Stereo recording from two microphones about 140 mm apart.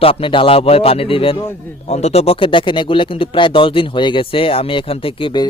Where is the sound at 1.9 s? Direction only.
50° left (ahead or behind).